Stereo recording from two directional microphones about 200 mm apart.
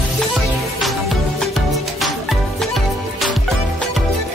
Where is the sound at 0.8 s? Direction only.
Centre (ahead or behind).